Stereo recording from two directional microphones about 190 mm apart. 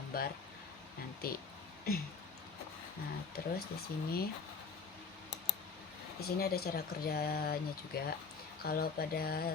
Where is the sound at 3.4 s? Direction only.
50° left (ahead or behind).